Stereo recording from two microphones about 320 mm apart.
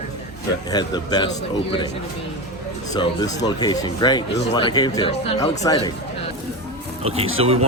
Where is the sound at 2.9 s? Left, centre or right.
Centre.